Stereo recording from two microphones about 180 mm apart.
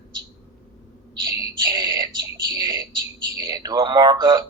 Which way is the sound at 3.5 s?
25° right (ahead or behind).